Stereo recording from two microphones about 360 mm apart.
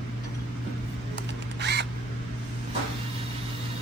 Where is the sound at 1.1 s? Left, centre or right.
Right.